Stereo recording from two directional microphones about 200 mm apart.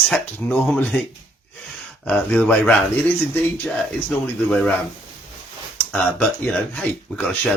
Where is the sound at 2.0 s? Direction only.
5° left (ahead or behind).